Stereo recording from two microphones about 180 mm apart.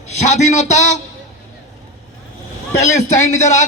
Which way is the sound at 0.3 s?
40° left (ahead or behind).